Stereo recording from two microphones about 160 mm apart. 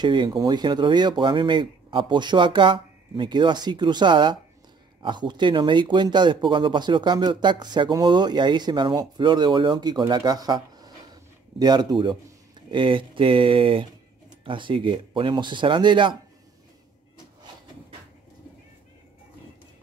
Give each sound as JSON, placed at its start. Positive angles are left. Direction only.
{"t": 0.0, "sound": "speech", "side_deg": -25}